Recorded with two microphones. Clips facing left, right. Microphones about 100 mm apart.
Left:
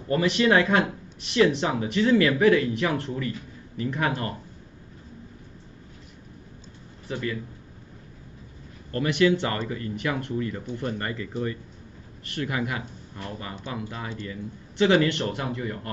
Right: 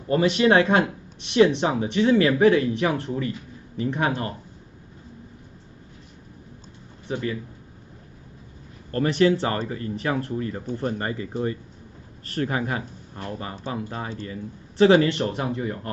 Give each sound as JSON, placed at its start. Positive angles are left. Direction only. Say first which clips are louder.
{"t": 0.1, "sound": "speech", "louder": "right 3 dB", "side_deg": -30}
{"t": 7.1, "sound": "a man's voice", "louder": "right 2 dB", "side_deg": -25}
{"t": 8.9, "sound": "speech", "louder": "right 2 dB", "side_deg": -35}
{"t": 12.3, "sound": "speech", "louder": "right 3 dB", "side_deg": -35}